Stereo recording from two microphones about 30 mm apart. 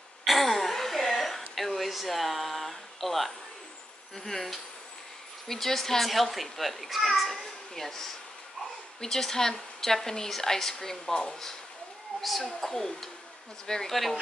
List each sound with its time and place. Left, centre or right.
0.2 s throat clearing: centre
1.5 s a sound: centre
4.1 s a woman's voice: centre
12.2 s speech: centre
12.4 s a woman's voice: centre